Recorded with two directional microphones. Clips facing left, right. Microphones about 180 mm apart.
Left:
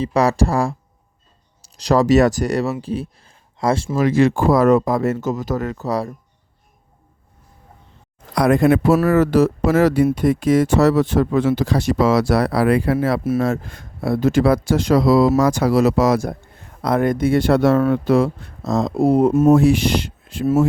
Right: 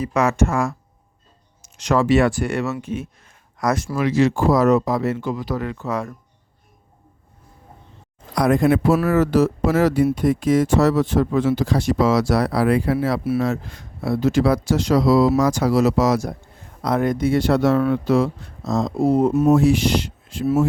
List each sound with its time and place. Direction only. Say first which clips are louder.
0.0 s speech: left 2 dB; 35° left (ahead or behind)
3.9 s speech: left 3 dB; 50° left (ahead or behind)
8.4 s speech: left 2 dB; 70° left (ahead or behind); by 9.1 s 45° left (ahead or behind)
9.1 s speech: left 2 dB; 60° left (ahead or behind)